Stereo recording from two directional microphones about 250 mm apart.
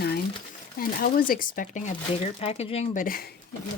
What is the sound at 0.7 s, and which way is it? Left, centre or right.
Speech, left.